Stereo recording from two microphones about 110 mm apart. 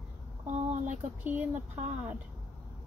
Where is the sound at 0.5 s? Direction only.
90° right.